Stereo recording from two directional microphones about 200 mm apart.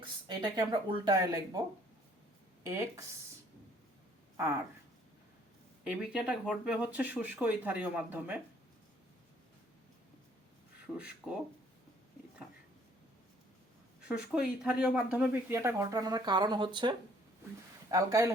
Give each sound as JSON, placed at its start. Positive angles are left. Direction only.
{"t": 0.0, "sound": "speech", "side_deg": -20}
{"t": 2.6, "sound": "speech", "side_deg": -15}
{"t": 5.8, "sound": "speech", "side_deg": -5}
{"t": 10.9, "sound": "speech", "side_deg": -5}
{"t": 14.0, "sound": "speech", "side_deg": -5}
{"t": 17.9, "sound": "speech", "side_deg": -15}